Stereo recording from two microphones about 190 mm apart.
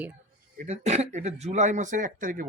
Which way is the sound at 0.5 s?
35° right (ahead or behind).